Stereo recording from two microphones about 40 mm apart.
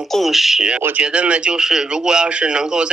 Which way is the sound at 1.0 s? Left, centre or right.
Right.